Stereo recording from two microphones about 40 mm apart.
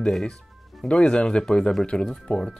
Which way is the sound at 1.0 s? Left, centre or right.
Left.